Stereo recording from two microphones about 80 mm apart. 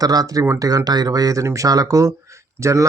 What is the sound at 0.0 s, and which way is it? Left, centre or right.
A man's voice, right.